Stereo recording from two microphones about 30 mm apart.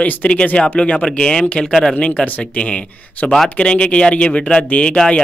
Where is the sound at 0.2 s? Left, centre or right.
Left.